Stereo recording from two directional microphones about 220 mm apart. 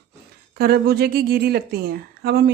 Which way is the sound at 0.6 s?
45° right (ahead or behind).